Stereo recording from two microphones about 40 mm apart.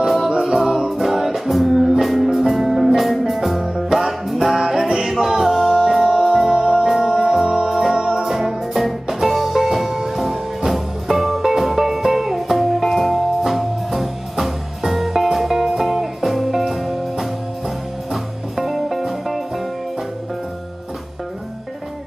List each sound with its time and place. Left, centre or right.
0.4 s music: centre
4.6 s music: centre
6.5 s music: centre
6.9 s music: centre
7.4 s music: centre
7.7 s music: centre